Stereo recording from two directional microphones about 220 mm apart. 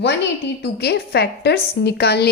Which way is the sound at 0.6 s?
50° left (ahead or behind).